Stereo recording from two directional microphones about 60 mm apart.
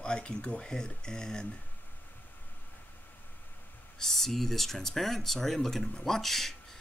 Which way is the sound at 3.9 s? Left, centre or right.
Centre.